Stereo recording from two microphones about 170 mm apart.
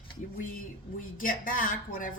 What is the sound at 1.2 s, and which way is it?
Speech, 55° left (ahead or behind).